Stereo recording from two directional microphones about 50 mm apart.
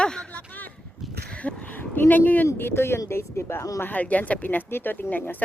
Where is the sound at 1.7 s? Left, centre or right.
Left.